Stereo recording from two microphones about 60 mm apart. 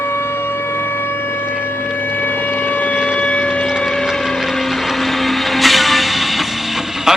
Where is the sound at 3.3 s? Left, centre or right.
Left.